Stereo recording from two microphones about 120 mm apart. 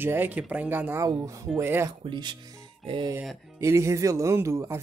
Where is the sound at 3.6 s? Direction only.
25° right (ahead or behind).